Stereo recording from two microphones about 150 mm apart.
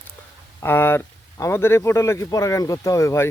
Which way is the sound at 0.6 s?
15° left (ahead or behind).